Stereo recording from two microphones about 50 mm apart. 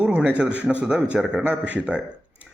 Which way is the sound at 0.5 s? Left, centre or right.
Right.